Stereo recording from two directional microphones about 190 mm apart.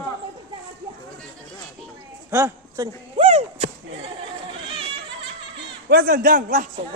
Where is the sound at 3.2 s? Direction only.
30° right (ahead or behind).